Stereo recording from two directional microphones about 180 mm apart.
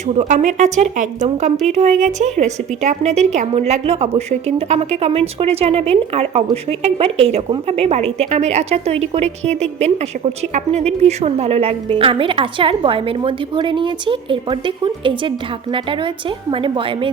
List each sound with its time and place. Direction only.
0.1 s a woman's voice: 40° right (ahead or behind)